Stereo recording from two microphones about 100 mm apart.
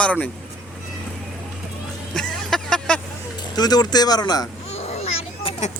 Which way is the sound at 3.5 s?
40° left (ahead or behind).